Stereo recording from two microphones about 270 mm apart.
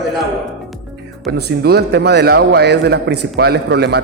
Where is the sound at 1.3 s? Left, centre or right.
Right.